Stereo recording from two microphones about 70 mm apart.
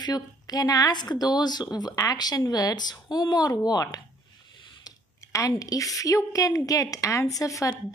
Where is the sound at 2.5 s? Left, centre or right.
Left.